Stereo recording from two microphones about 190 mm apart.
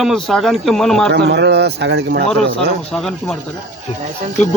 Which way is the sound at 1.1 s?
65° right (ahead or behind).